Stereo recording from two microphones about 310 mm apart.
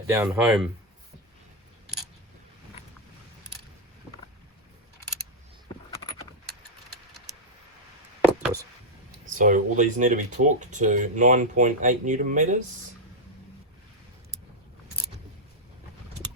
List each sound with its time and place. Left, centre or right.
0.1 s speech: centre
9.3 s speech: right